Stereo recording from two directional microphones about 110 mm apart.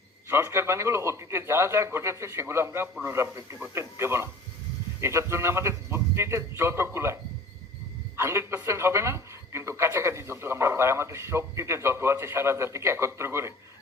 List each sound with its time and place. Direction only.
0.3 s speech: 25° right (ahead or behind)